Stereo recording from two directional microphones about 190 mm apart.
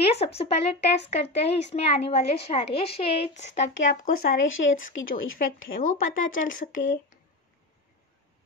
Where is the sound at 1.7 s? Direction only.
30° left (ahead or behind).